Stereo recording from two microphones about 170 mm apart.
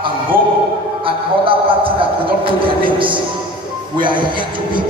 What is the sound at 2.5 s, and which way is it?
Music, 30° right (ahead or behind).